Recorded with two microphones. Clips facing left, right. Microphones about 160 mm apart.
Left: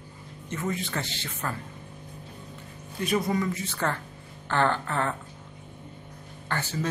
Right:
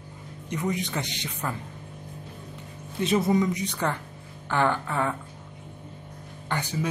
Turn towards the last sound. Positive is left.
turn(degrees=-15)  # may be behind; listen again after turning